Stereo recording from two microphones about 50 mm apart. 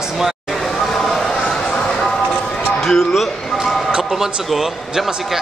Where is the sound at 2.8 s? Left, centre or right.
Centre.